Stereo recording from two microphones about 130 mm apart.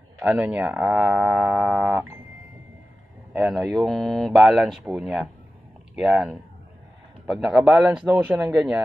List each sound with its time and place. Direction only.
0.2 s speech: 10° right (ahead or behind)
3.4 s speech: 5° left (ahead or behind)
8.1 s speech: 15° right (ahead or behind)